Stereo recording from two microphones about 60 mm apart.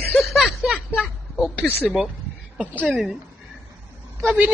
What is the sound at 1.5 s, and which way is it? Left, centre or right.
Speech, left.